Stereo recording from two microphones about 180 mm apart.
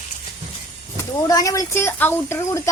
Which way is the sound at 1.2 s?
20° left (ahead or behind).